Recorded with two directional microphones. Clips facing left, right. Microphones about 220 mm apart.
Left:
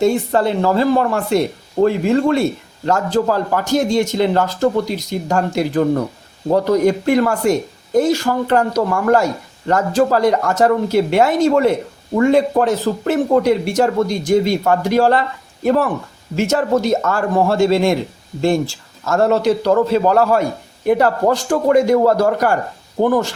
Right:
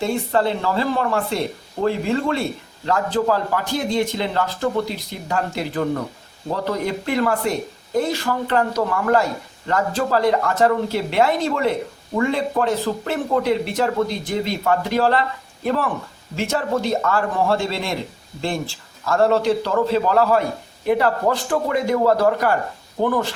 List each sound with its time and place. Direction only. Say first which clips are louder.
0.0 s a man's voice: left 5 dB; 45° left (ahead or behind)